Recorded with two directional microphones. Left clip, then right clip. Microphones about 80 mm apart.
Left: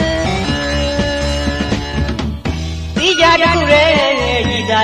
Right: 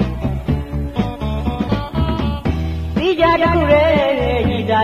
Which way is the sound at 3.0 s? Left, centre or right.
Right.